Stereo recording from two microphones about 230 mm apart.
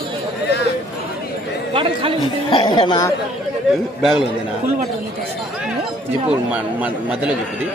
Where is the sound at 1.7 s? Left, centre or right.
Right.